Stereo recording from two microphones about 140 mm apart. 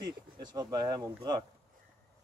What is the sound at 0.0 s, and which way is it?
Speech, 30° right (ahead or behind).